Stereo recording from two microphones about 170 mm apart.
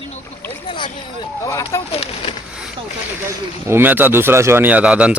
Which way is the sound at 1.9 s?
35° left (ahead or behind).